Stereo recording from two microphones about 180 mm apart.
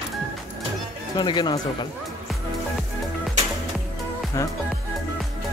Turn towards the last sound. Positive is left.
turn(degrees=20)  # may be behind; listen again after turning